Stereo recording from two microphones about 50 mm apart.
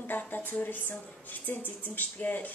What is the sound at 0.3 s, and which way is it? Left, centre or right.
A woman's voice, left.